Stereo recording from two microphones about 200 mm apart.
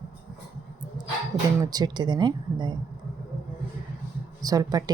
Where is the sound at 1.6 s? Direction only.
20° right (ahead or behind).